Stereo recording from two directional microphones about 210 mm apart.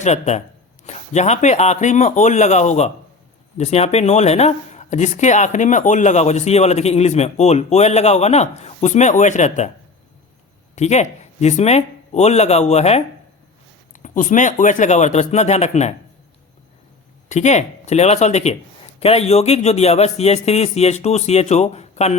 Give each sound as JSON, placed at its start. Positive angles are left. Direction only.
{"t": 0.0, "sound": "speech", "side_deg": 30}
{"t": 10.8, "sound": "speech", "side_deg": 35}
{"t": 17.2, "sound": "speech", "side_deg": 35}